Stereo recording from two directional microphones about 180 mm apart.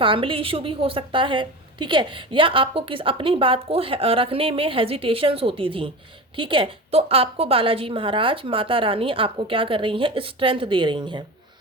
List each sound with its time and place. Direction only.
0.0 s a woman's voice: 30° right (ahead or behind)